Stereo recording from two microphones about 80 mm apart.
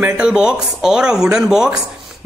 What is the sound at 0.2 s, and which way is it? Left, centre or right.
Speech, centre.